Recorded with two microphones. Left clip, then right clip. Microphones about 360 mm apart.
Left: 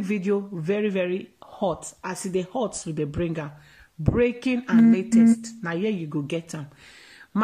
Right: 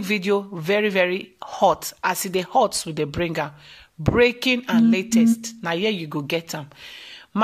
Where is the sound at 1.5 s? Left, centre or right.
Right.